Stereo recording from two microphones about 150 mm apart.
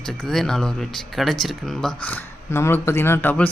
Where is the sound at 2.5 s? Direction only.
15° left (ahead or behind).